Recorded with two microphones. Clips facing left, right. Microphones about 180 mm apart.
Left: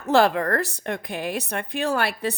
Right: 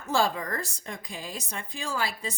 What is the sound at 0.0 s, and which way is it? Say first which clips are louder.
A woman's voice: left 8 dB; 65° left (ahead or behind).